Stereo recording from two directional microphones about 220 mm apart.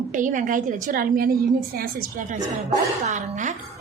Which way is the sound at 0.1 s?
35° right (ahead or behind).